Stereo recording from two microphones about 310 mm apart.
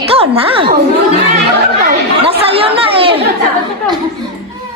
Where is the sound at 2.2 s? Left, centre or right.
Centre.